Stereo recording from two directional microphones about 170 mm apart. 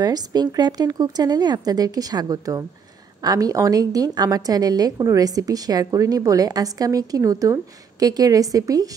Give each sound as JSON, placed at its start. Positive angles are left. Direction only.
{"t": 0.0, "sound": "a woman's voice", "side_deg": -25}